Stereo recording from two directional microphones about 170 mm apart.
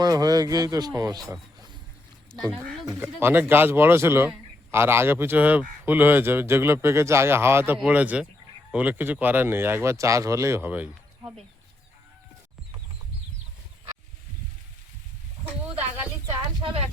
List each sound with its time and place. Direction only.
0.0 s speech: 20° right (ahead or behind)
2.8 s speech: 15° right (ahead or behind)
16.2 s a sound: 25° right (ahead or behind)